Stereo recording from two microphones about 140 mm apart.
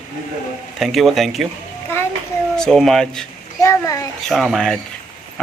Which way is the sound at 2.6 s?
Centre (ahead or behind).